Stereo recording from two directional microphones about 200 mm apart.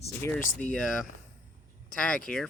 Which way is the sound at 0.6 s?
5° left (ahead or behind).